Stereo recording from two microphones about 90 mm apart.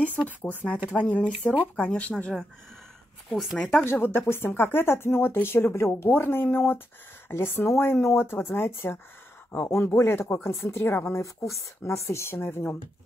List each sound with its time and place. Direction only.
0.4 s speech: 20° left (ahead or behind)
3.5 s speech: 5° left (ahead or behind)
3.8 s speech: 25° left (ahead or behind)
11.9 s speech: 35° left (ahead or behind)